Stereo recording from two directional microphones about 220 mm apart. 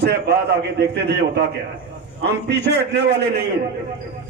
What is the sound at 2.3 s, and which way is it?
A man's voice, 50° right (ahead or behind).